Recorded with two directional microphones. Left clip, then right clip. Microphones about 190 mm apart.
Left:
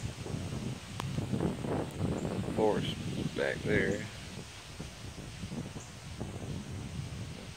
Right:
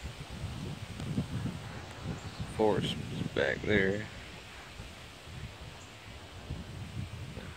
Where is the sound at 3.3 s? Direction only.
20° right (ahead or behind).